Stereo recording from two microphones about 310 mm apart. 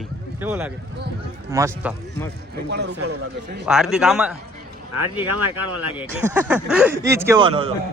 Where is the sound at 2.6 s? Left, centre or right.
Right.